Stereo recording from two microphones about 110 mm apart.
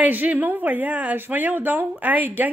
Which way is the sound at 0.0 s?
15° right (ahead or behind).